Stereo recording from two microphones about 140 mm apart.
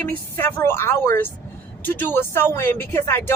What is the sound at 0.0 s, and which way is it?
Speech, 15° left (ahead or behind).